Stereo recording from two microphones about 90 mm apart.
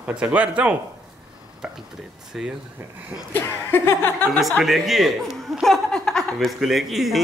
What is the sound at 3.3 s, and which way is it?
Chuckle, 25° left (ahead or behind).